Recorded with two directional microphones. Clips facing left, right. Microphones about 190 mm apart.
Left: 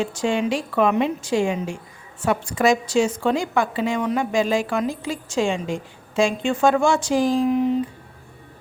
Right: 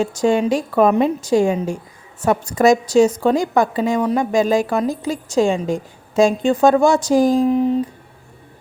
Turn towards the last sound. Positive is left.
turn(degrees=-35)  # may be behind; listen again after turning